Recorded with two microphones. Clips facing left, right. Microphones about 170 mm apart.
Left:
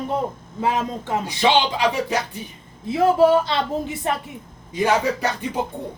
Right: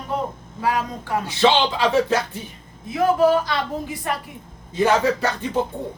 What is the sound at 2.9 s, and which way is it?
A woman's voice, 30° left (ahead or behind).